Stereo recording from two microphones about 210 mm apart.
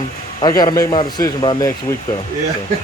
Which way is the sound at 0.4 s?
15° left (ahead or behind).